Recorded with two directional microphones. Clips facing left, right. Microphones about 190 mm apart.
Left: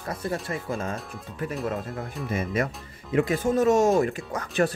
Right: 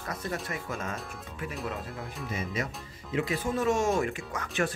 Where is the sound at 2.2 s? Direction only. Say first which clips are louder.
Left 7 dB; 55° left (ahead or behind).